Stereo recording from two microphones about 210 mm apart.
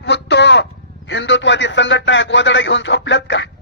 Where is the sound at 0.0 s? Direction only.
55° left (ahead or behind).